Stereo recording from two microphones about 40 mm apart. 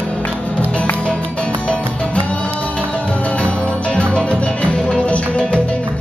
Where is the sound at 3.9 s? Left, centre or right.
Left.